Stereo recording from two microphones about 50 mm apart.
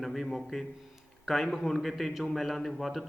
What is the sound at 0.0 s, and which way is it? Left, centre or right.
A man's voice, centre.